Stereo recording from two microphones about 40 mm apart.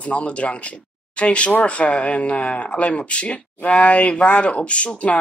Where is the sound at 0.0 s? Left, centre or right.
Left.